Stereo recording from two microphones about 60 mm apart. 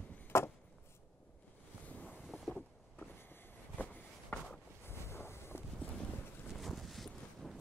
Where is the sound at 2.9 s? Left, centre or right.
Left.